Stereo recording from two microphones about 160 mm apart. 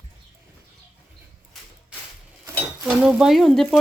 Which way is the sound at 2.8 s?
5° right (ahead or behind).